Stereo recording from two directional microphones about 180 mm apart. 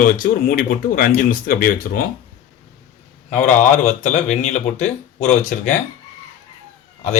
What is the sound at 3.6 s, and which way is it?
Speech, 40° left (ahead or behind).